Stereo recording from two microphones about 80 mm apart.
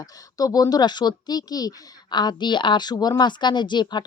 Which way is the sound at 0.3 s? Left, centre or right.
Left.